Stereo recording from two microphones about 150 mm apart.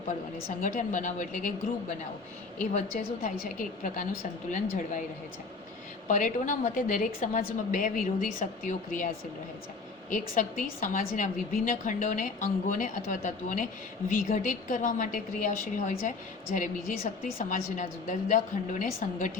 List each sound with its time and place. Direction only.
0.6 s a woman's voice: 60° left (ahead or behind)
3.2 s a woman's voice: 60° left (ahead or behind)
6.1 s a woman's voice: 60° left (ahead or behind)
10.1 s a woman's voice: 60° left (ahead or behind)